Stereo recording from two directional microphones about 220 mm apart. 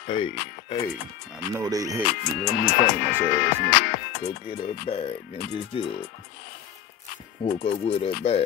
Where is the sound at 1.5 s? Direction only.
15° right (ahead or behind).